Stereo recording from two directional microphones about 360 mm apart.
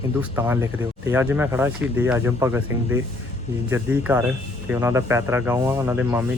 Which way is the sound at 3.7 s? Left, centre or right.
Centre.